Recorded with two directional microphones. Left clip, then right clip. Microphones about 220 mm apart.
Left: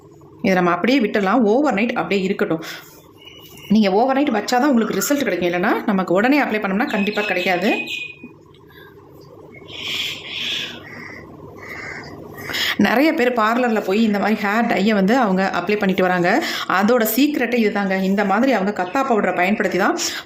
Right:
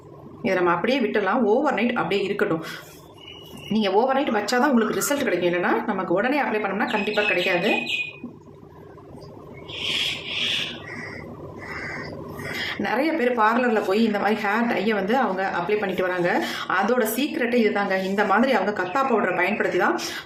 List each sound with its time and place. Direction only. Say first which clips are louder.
0.4 s speech: left 4 dB; 35° left (ahead or behind)
3.7 s speech: left 4 dB; 35° left (ahead or behind)
12.6 s speech: left 8 dB; 45° left (ahead or behind)